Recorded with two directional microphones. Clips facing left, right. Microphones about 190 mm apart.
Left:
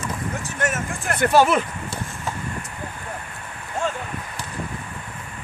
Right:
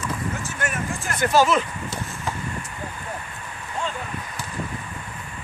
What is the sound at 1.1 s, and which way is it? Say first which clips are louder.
Speech: left 2 dB; 60° left (ahead or behind).